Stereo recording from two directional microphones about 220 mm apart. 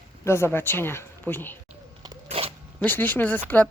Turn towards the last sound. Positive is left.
turn(degrees=10)  # may be behind; listen again after turning